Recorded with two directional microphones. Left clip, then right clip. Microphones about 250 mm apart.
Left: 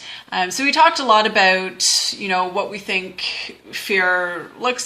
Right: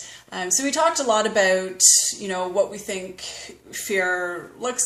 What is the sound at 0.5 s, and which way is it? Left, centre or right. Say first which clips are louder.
Speech: left 6 dB; centre.